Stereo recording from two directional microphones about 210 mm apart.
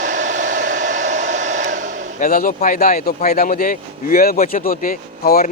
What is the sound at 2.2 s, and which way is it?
Speech, 40° left (ahead or behind).